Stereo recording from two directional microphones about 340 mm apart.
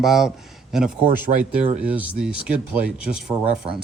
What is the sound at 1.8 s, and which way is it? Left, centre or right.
Speech, centre.